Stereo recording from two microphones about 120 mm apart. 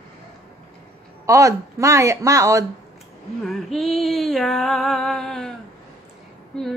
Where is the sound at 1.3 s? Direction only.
25° right (ahead or behind).